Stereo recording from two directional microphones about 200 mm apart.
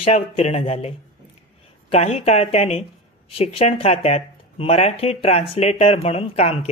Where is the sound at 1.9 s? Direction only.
30° left (ahead or behind).